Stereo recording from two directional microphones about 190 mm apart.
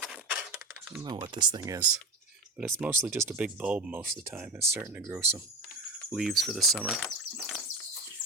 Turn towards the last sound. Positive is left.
turn(degrees=0)  # may be behind; listen again after turning